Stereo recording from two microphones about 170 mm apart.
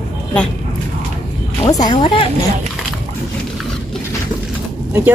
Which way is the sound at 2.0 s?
30° left (ahead or behind).